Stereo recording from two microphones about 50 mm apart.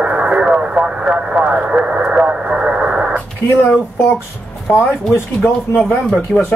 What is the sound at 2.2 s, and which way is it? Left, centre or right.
Radio, right.